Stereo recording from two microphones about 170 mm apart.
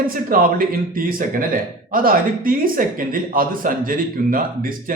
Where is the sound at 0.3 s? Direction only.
55° right (ahead or behind).